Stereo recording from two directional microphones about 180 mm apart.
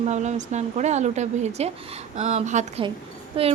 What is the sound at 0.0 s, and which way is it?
Speech, 40° right (ahead or behind).